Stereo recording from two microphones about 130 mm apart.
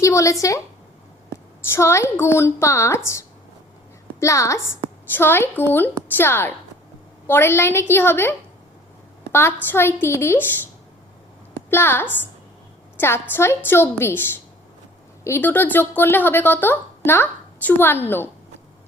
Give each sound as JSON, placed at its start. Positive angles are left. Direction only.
{"t": 0.0, "sound": "a woman's voice", "side_deg": 25}
{"t": 1.7, "sound": "a woman's voice", "side_deg": 20}
{"t": 11.5, "sound": "a woman's voice", "side_deg": 20}